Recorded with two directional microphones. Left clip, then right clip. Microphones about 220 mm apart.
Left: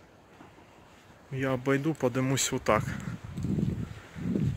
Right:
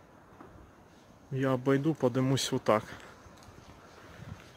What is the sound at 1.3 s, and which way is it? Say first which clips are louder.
Speech: even; 20° right (ahead or behind).